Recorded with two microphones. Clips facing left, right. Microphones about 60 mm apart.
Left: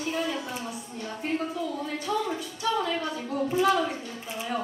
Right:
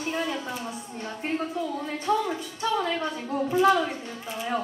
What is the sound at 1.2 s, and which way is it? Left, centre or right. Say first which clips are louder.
Music: right 1 dB; right.